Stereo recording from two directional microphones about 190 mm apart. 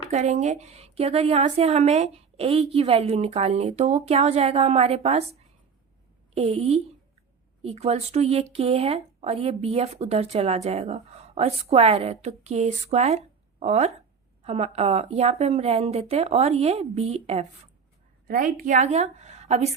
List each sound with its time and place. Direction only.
0.1 s speech: 35° right (ahead or behind)
6.3 s speech: 30° right (ahead or behind)
18.3 s speech: 45° right (ahead or behind)